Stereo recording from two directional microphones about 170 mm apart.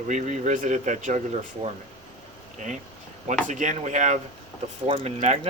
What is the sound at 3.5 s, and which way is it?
Speech, 45° right (ahead or behind).